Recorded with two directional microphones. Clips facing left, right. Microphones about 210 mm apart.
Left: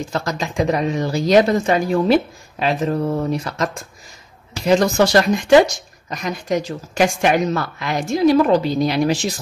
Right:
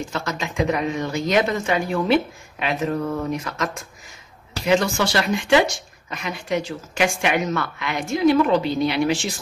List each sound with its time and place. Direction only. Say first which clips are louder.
0.1 s speech: left 4 dB; 35° left (ahead or behind)